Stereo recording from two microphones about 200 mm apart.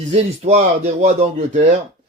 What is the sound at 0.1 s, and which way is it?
A man's voice, 35° right (ahead or behind).